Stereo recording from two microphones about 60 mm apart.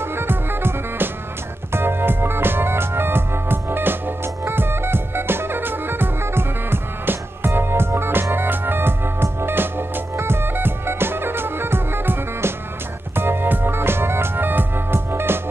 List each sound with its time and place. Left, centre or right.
0.0 s music: right